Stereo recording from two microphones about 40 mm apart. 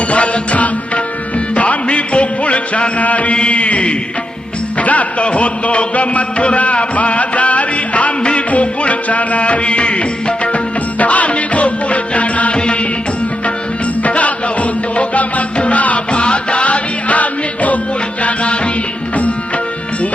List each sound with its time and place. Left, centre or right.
0.1 s music: left
4.8 s a man's voice: left
8.4 s music: left
14.0 s music: left
16.2 s music: left